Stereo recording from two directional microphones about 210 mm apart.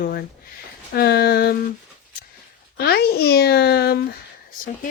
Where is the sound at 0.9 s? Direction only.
50° left (ahead or behind).